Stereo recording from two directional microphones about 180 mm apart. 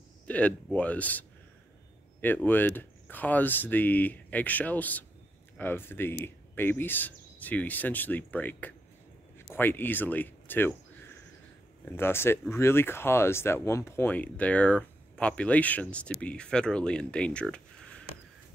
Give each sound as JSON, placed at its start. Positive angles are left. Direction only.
{"t": 0.3, "sound": "speech", "side_deg": 5}
{"t": 2.2, "sound": "speech", "side_deg": 10}